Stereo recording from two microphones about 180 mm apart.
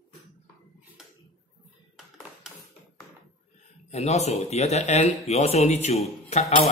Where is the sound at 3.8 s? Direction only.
40° left (ahead or behind).